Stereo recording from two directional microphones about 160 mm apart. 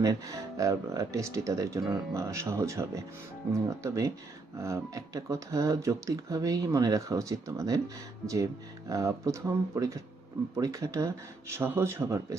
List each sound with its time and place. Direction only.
0.0 s speech: 20° right (ahead or behind)
8.9 s speech: 20° right (ahead or behind)